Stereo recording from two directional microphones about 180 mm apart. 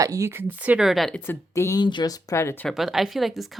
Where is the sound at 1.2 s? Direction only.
15° left (ahead or behind).